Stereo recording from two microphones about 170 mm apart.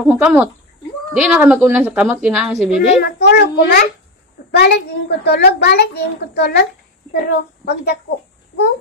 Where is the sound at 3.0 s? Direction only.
70° left (ahead or behind).